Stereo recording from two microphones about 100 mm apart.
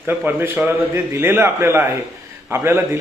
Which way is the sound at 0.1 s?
20° right (ahead or behind).